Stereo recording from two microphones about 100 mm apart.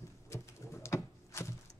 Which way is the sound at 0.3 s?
30° left (ahead or behind).